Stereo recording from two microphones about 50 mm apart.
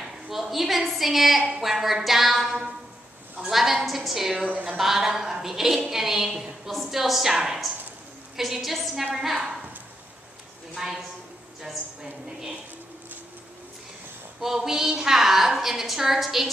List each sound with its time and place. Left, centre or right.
0.0 s a woman's voice: centre
4.5 s speech: right
4.7 s a woman's voice: centre
10.7 s a woman's voice: centre
12.3 s a woman's voice: centre
14.4 s a woman's voice: centre